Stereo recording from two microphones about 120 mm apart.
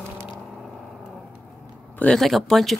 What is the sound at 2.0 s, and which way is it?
Speech, 5° left (ahead or behind).